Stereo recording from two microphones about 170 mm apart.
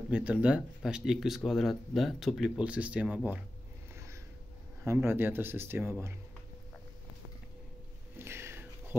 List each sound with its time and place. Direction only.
0.1 s speech: 5° right (ahead or behind)
3.9 s a sound: 15° right (ahead or behind)
4.8 s speech: 15° right (ahead or behind)
8.2 s music: 15° right (ahead or behind)